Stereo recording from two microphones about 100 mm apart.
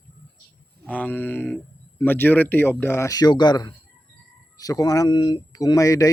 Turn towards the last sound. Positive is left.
turn(degrees=35)  # may be behind; listen again after turning